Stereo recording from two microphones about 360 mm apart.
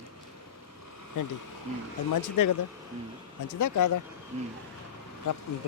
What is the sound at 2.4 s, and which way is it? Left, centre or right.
Speech, left.